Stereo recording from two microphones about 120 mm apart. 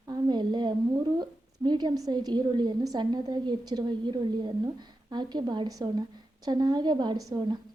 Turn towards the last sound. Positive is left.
turn(degrees=-35)  # may be behind; listen again after turning